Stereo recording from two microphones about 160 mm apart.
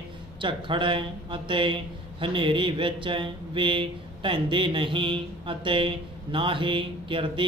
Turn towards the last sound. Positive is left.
turn(degrees=-30)  # may be behind; listen again after turning